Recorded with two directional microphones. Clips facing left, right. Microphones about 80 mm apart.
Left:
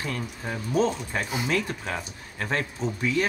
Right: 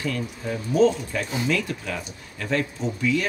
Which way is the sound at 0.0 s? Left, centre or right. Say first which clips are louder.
Right 4 dB; left.